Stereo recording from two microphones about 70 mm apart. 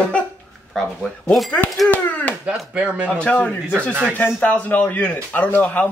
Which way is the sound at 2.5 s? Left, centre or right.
Centre.